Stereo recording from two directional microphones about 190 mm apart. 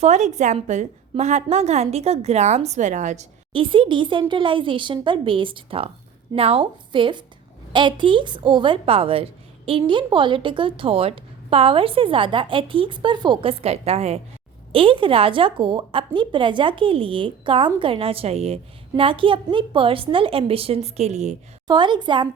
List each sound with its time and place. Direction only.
0.0 s a woman's voice: 35° right (ahead or behind)
3.5 s a woman's voice: 25° right (ahead or behind)
21.7 s a woman's voice: 25° right (ahead or behind)